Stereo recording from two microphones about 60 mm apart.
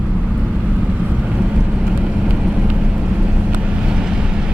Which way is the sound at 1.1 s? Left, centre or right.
Centre.